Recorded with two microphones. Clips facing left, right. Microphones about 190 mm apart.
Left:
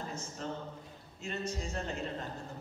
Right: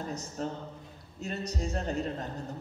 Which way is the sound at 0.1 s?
35° right (ahead or behind).